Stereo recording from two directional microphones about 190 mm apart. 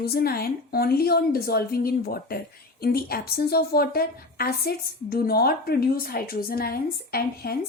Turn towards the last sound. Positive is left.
turn(degrees=50)  # may be behind; listen again after turning